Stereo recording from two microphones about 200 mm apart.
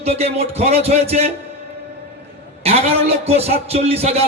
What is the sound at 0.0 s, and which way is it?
A man's voice, 30° right (ahead or behind).